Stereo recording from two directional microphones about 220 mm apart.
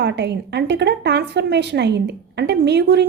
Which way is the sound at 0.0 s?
50° right (ahead or behind).